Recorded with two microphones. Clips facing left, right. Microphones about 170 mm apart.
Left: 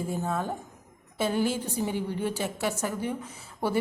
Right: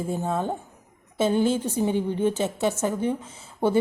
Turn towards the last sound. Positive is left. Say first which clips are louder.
# right 6 dB
turn(degrees=-25)  # may be behind; listen again after turning